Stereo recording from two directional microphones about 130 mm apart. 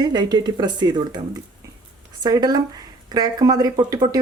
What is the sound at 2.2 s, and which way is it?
Speech, 30° right (ahead or behind).